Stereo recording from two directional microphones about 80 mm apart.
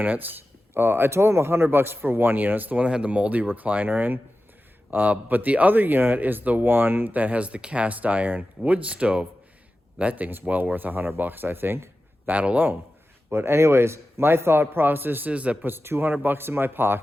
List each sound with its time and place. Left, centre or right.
0.0 s speech: right
13.3 s speech: right; by 15.5 s centre
15.6 s speech: right